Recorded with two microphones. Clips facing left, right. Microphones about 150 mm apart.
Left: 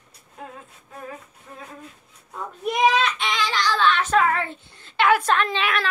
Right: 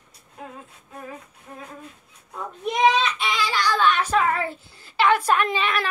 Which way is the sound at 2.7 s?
5° left (ahead or behind).